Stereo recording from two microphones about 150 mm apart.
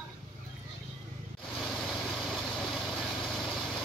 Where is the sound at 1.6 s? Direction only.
5° left (ahead or behind).